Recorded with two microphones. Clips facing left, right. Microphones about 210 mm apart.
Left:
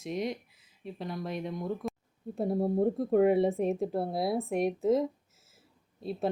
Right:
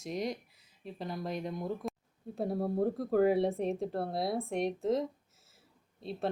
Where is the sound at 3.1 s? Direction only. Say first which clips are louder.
Left 3 dB; centre (ahead or behind).